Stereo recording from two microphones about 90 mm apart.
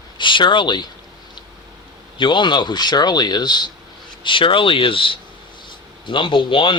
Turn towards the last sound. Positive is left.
turn(degrees=70)  # may be behind; listen again after turning